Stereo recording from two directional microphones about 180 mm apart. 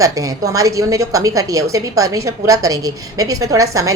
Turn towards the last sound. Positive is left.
turn(degrees=-20)  # may be behind; listen again after turning